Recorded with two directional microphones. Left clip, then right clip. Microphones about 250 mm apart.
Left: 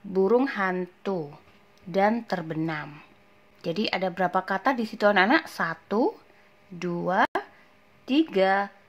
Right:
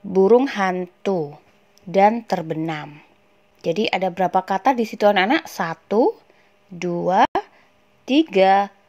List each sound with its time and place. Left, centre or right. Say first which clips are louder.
0.1 s speech: right 8 dB; centre